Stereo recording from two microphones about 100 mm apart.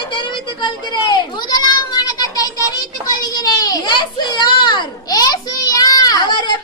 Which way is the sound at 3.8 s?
50° left (ahead or behind).